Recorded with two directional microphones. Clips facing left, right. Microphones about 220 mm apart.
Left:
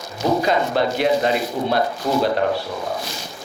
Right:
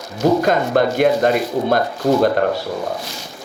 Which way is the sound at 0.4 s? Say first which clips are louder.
Right 3 dB; 50° right (ahead or behind).